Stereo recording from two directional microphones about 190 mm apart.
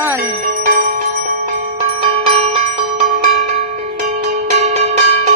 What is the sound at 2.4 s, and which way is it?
Bell, 35° right (ahead or behind).